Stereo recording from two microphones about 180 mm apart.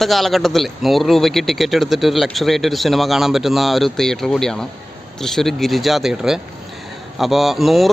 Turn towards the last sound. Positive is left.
turn(degrees=0)  # may be behind; listen again after turning